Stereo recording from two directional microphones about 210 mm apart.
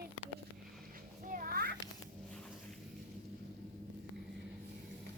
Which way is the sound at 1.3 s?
40° right (ahead or behind).